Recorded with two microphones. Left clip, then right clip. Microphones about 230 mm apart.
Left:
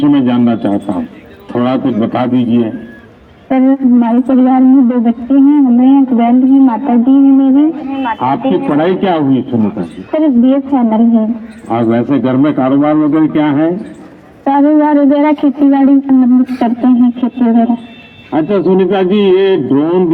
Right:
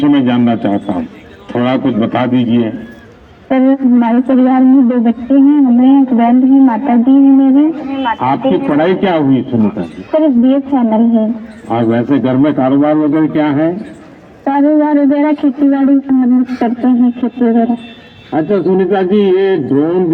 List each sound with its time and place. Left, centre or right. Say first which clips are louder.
0.0 s a man's voice: left 1 dB; left